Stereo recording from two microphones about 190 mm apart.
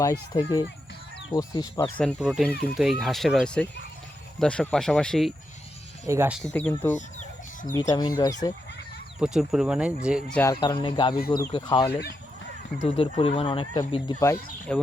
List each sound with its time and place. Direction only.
0.0 s speech: 15° left (ahead or behind)
2.0 s speech: 5° left (ahead or behind)
6.1 s speech: 15° right (ahead or behind)
6.5 s speech: 5° left (ahead or behind)
6.9 s chicken: 40° left (ahead or behind)
7.7 s speech: 20° left (ahead or behind)
9.2 s speech: 5° right (ahead or behind)
10.5 s speech: 25° left (ahead or behind)
11.9 s speech: 55° left (ahead or behind)
12.8 s speech: 30° left (ahead or behind)
14.7 s speech: 5° left (ahead or behind)